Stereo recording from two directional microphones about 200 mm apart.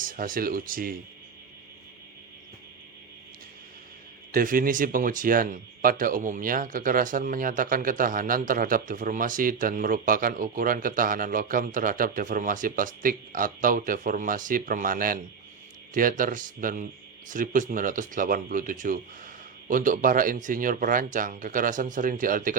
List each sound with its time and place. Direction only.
0.0 s speech: 45° right (ahead or behind)
4.3 s speech: 45° right (ahead or behind)